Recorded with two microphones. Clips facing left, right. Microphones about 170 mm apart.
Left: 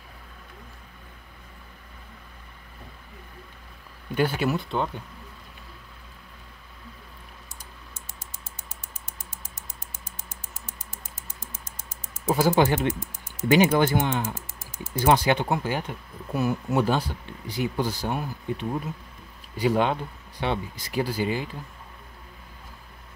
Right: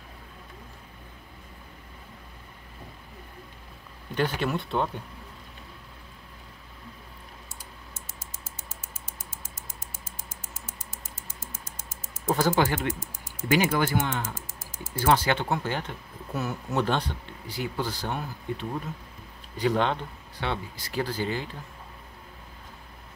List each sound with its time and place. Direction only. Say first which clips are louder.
4.1 s speech: left 3 dB; 10° left (ahead or behind)
12.3 s speech: left 3 dB; 15° left (ahead or behind)
17.5 s speech: left 4 dB; 15° left (ahead or behind)